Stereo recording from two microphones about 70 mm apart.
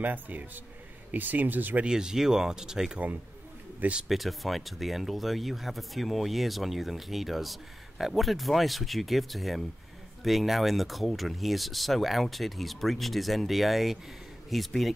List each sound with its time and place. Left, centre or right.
0.0 s speech: right
1.9 s speech: centre
4.1 s speech: centre